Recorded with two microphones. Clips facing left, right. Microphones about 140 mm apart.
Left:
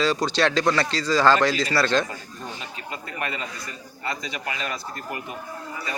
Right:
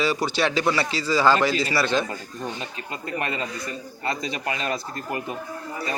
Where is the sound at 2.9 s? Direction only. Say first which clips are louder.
Right 3 dB; 25° right (ahead or behind).